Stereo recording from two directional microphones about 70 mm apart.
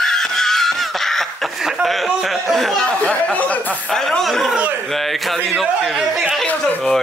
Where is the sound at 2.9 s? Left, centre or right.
Centre.